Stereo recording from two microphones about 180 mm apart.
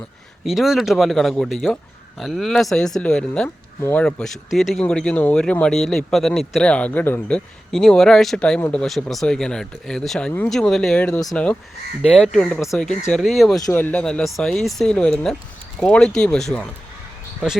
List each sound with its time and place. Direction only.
0.4 s speech: centre (ahead or behind)
13.6 s speech: 15° left (ahead or behind)